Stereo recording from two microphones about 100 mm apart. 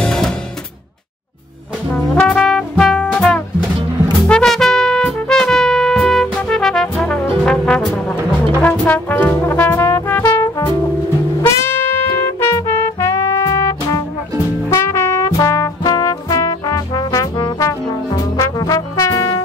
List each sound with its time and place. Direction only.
0.0 s music: 5° left (ahead or behind)
1.9 s brass instrument: 10° left (ahead or behind)
4.2 s music: 5° left (ahead or behind)
7.4 s brass instrument: 10° left (ahead or behind)
8.1 s brass instrument: 20° left (ahead or behind)
11.4 s music: 20° left (ahead or behind)
14.7 s brass instrument: 30° left (ahead or behind)